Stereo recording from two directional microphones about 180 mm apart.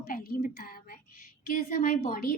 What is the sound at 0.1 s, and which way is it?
A woman's voice, 55° left (ahead or behind).